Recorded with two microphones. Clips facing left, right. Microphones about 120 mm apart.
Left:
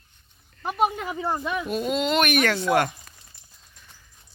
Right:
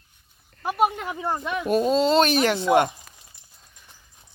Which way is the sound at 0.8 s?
Centre (ahead or behind).